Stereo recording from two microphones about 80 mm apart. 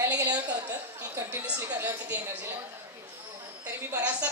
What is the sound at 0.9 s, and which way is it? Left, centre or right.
A woman's voice, right.